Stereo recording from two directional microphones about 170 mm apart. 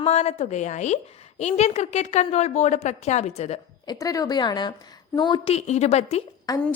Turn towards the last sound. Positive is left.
turn(degrees=25)  # may be behind; listen again after turning